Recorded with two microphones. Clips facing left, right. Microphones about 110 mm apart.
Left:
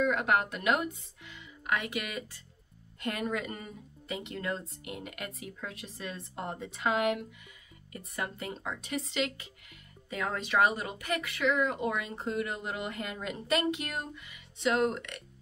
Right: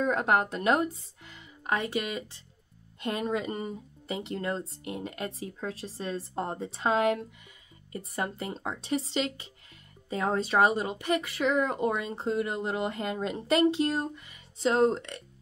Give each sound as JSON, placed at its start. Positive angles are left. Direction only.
{"t": 0.0, "sound": "speech", "side_deg": -35}